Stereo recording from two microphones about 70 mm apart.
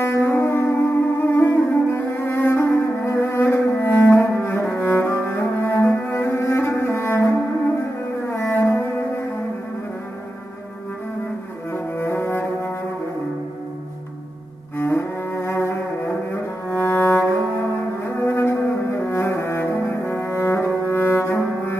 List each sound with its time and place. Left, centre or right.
0.0 s music: left
4.7 s cello: left
8.5 s music: left
11.7 s music: left
14.8 s cello: left
16.7 s cello: left
18.0 s music: left
20.1 s cello: left